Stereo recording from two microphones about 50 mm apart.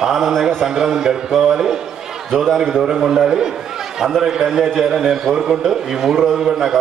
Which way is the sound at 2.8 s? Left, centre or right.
Centre.